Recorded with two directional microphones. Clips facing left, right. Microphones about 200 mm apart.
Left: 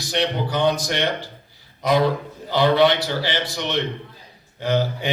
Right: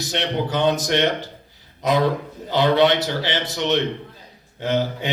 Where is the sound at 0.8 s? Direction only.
20° right (ahead or behind).